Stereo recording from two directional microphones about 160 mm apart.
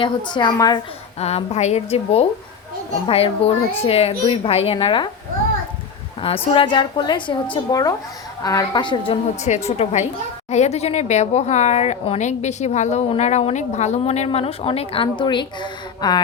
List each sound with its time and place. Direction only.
0.0 s a woman's voice: 30° left (ahead or behind)
1.2 s speech: 40° left (ahead or behind)
6.2 s a woman's voice: 35° left (ahead or behind)
9.3 s speech: 45° left (ahead or behind); by 16.2 s 25° left (ahead or behind)